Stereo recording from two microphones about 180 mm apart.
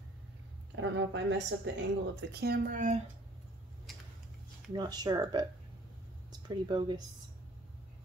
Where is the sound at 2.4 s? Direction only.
55° right (ahead or behind).